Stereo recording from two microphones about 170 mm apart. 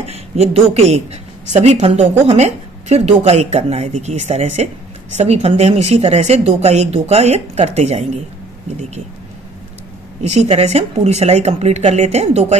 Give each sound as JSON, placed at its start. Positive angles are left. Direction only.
{"t": 0.1, "sound": "a woman's voice", "side_deg": -40}
{"t": 10.2, "sound": "a woman's voice", "side_deg": -40}